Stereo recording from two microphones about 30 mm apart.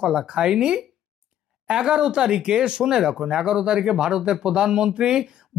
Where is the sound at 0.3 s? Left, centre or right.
Right.